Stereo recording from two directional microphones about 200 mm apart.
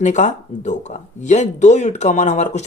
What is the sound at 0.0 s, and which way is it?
Speech, 35° left (ahead or behind).